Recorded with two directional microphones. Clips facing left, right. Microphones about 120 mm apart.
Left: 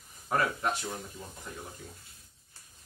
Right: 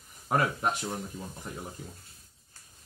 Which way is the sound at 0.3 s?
30° right (ahead or behind).